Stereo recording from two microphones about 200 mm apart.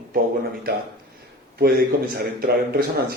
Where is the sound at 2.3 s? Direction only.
50° right (ahead or behind).